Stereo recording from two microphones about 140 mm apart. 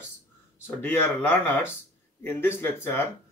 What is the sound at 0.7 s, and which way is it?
Speech, 15° left (ahead or behind).